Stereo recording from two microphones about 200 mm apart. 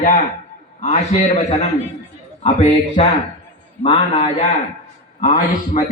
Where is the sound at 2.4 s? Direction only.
30° left (ahead or behind).